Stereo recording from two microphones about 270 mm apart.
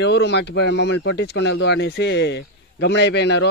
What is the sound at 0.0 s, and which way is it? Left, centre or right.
Speech, left.